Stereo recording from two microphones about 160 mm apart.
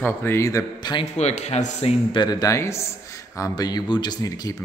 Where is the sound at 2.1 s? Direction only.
25° left (ahead or behind).